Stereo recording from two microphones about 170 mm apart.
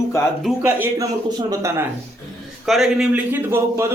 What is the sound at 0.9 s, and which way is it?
Speech, 20° right (ahead or behind).